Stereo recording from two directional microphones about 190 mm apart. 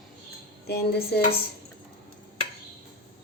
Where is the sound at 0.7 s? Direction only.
55° left (ahead or behind).